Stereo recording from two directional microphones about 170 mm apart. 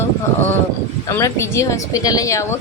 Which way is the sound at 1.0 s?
15° left (ahead or behind).